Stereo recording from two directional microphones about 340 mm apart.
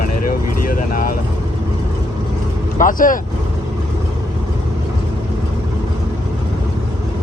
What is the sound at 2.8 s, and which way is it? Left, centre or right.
Speech, left.